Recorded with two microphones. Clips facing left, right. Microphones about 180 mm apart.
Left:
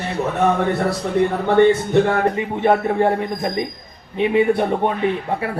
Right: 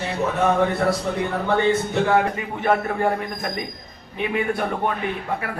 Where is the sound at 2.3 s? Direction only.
25° left (ahead or behind).